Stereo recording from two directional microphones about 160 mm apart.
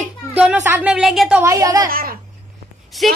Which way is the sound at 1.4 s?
20° right (ahead or behind).